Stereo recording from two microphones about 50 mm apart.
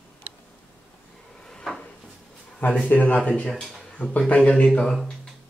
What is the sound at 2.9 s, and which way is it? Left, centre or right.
Speech, left.